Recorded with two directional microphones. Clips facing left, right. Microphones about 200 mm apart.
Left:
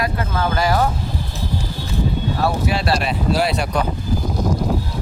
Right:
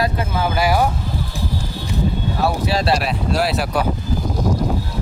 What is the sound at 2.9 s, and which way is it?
Speech, centre (ahead or behind).